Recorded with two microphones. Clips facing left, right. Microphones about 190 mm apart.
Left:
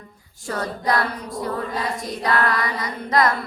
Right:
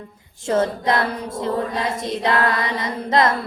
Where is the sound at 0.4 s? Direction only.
25° right (ahead or behind).